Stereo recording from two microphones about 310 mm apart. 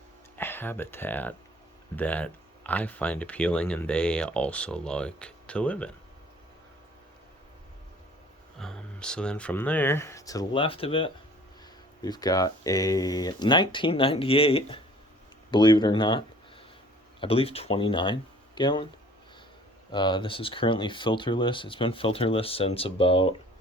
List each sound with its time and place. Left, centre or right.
0.3 s speech: centre
8.5 s speech: centre
19.9 s speech: centre